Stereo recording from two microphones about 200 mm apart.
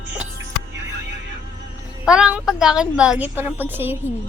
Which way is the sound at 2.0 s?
5° right (ahead or behind).